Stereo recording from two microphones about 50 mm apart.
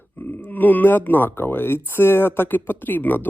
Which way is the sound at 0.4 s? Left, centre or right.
Left.